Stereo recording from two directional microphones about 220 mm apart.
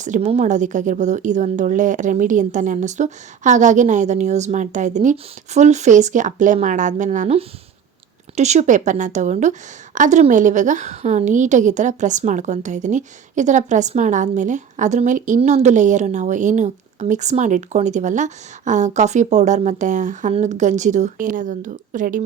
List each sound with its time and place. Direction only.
0.0 s a woman's voice: 35° right (ahead or behind)